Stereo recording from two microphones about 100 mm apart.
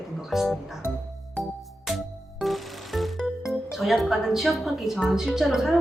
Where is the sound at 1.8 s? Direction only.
Centre (ahead or behind).